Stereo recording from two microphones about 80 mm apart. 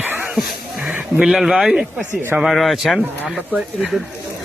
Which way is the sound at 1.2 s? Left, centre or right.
Centre.